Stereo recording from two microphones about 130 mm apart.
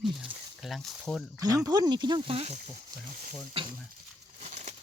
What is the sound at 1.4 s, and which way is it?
Speech, 30° right (ahead or behind).